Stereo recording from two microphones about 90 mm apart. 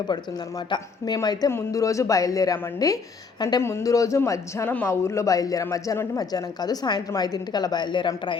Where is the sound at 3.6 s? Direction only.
30° left (ahead or behind).